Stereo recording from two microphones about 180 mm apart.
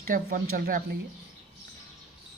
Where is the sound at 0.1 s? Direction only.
55° right (ahead or behind).